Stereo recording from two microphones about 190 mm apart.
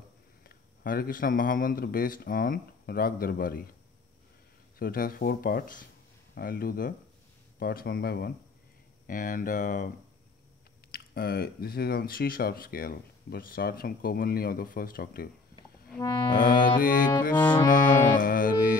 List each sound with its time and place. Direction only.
0.5 s speech: 50° left (ahead or behind)
4.7 s speech: 50° left (ahead or behind)
9.0 s speech: 45° left (ahead or behind)
16.0 s music: 20° left (ahead or behind)
16.3 s speech: 45° left (ahead or behind)
17.4 s music: 25° left (ahead or behind)
17.6 s speech: 45° left (ahead or behind)